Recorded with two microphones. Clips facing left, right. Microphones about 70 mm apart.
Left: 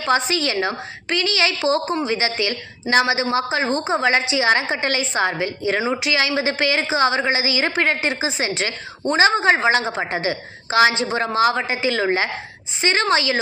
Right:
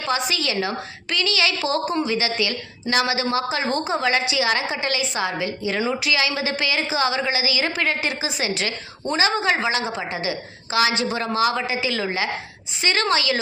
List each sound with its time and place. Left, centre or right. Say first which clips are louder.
0.0 s a woman's voice: left 4 dB; left